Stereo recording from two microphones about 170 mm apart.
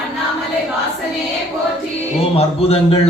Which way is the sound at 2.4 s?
35° left (ahead or behind).